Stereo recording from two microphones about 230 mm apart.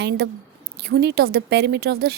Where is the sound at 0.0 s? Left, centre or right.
Right.